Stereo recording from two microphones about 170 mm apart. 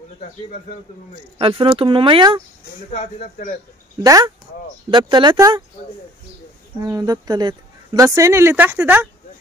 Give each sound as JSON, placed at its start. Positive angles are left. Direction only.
{"t": 1.4, "sound": "speech", "side_deg": -30}
{"t": 2.9, "sound": "speech", "side_deg": 40}
{"t": 4.0, "sound": "speech", "side_deg": -20}
{"t": 6.8, "sound": "speech", "side_deg": -20}